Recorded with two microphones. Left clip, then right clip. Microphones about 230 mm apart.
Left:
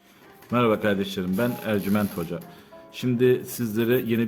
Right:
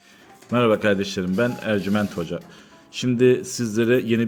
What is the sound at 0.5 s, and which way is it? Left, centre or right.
A man's voice, centre.